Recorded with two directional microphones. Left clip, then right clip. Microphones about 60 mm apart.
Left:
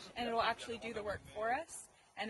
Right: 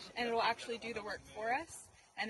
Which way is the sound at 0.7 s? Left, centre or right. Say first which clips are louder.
Even; left.